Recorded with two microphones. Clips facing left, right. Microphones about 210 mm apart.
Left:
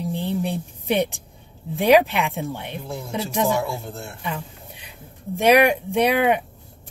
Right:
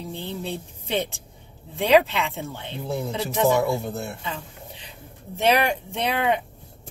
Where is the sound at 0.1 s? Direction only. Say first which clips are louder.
Left 5 dB; 15° left (ahead or behind).